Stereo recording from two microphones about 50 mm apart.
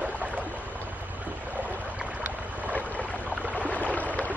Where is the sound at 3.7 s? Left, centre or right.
Left.